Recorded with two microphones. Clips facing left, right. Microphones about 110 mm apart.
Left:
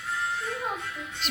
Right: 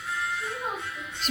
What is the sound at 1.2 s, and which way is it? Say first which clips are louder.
Speech: right 5 dB; 45° right (ahead or behind).